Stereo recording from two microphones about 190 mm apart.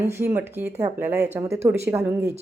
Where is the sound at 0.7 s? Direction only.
35° right (ahead or behind).